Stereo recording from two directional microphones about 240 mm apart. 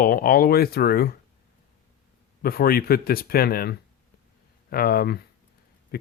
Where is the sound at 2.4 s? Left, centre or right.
Left.